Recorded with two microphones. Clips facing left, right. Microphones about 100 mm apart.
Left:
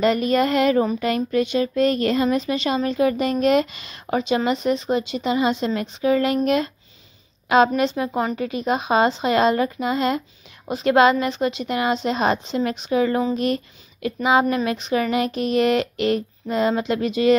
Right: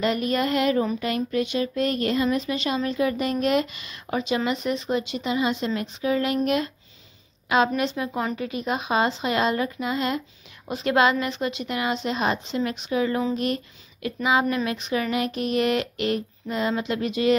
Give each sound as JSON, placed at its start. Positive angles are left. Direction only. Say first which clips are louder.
{"t": 0.0, "sound": "speech", "louder": "left 5 dB", "side_deg": 35}